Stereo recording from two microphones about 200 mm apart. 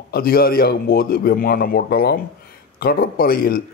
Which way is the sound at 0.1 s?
50° left (ahead or behind).